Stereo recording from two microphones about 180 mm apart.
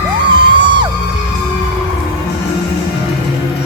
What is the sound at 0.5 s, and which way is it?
Music, 25° right (ahead or behind).